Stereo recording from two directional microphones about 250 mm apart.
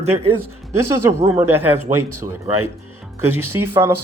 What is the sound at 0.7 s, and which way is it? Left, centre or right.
Speech, centre.